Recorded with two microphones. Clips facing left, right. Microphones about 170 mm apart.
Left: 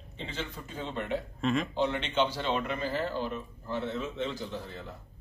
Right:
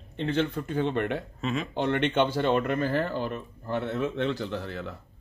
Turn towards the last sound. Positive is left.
turn(degrees=-75)  # may be behind; listen again after turning